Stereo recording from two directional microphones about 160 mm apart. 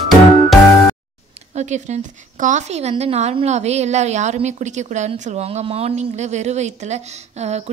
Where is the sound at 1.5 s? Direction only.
45° right (ahead or behind).